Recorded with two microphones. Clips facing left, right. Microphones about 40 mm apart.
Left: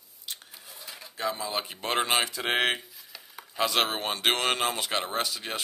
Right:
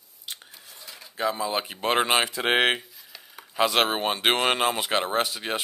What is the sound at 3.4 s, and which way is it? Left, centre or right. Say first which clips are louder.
Speech: right 4 dB; centre.